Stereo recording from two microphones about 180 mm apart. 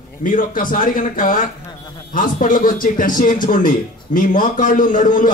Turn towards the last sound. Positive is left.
turn(degrees=45)  # may be behind; listen again after turning